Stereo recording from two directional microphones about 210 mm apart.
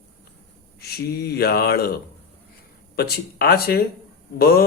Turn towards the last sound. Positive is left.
turn(degrees=45)  # may be behind; listen again after turning